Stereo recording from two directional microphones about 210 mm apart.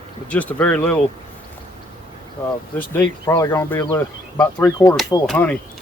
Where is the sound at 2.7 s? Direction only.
10° left (ahead or behind).